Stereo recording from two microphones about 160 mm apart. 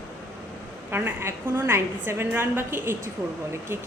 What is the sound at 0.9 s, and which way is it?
A woman's voice, 15° right (ahead or behind).